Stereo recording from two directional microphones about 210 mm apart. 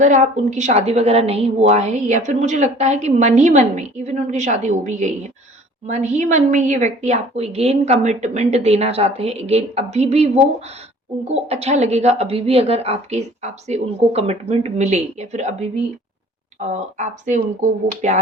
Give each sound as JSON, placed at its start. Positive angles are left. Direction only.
{"t": 0.0, "sound": "a woman's voice", "side_deg": -35}
{"t": 16.7, "sound": "a woman's voice", "side_deg": -35}